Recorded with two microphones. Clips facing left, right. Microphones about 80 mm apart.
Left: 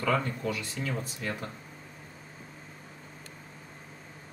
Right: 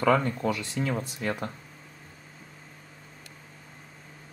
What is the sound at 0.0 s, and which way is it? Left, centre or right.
Speech, right.